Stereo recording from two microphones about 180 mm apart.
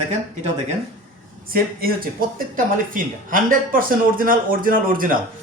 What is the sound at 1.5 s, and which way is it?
Speech, 55° right (ahead or behind).